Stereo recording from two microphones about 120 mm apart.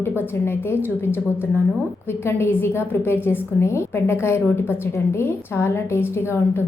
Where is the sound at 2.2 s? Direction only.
20° left (ahead or behind).